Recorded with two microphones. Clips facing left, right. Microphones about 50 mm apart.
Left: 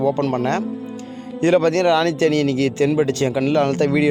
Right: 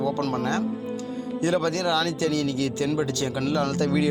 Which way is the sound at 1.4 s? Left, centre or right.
Left.